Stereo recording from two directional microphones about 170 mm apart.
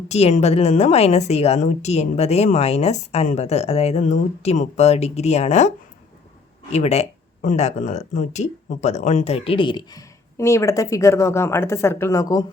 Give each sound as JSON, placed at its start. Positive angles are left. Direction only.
{"t": 0.1, "sound": "a woman's voice", "side_deg": 40}